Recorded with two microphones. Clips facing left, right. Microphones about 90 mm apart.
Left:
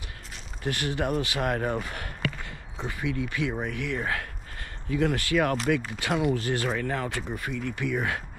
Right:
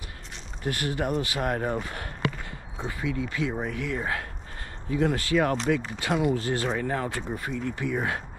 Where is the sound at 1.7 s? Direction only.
30° right (ahead or behind).